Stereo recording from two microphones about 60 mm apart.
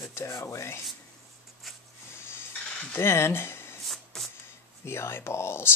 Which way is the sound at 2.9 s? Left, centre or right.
Left.